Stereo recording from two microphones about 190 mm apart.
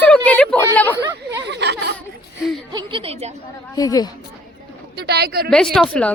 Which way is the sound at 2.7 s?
25° right (ahead or behind).